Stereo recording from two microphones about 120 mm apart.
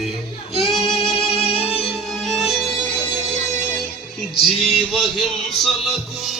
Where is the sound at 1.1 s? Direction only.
55° left (ahead or behind).